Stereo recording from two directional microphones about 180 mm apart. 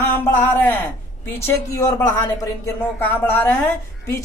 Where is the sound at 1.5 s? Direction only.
20° left (ahead or behind).